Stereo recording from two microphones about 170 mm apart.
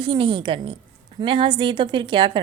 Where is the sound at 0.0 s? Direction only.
30° right (ahead or behind).